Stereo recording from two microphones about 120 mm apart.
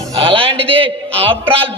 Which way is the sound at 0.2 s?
50° right (ahead or behind).